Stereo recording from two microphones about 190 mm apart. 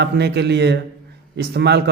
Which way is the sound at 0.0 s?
60° right (ahead or behind).